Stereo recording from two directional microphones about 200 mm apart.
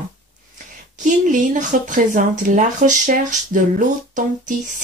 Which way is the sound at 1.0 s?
40° right (ahead or behind).